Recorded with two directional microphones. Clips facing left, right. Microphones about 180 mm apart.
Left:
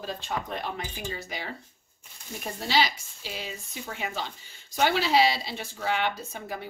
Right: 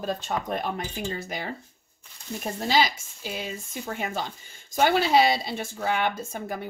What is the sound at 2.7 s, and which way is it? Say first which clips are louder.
Speech: right 2 dB; 50° right (ahead or behind).